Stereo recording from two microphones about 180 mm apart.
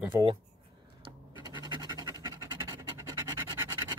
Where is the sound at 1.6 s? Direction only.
25° right (ahead or behind).